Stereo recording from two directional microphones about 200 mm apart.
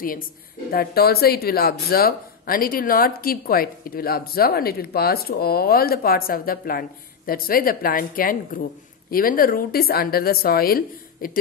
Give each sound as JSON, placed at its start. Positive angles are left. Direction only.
{"t": 0.7, "sound": "speech", "side_deg": 50}